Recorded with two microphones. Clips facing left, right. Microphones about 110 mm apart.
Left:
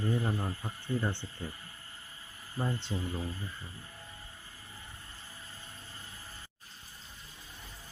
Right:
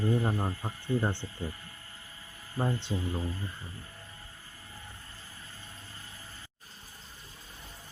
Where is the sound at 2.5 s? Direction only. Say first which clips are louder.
Right 3 dB; 30° right (ahead or behind).